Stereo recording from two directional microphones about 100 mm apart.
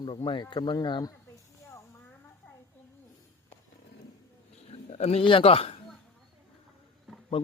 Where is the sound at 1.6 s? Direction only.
25° left (ahead or behind).